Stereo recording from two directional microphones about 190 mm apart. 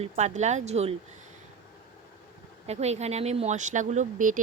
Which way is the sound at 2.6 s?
35° right (ahead or behind).